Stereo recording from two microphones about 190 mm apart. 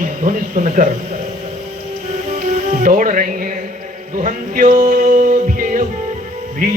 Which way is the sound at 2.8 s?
45° right (ahead or behind).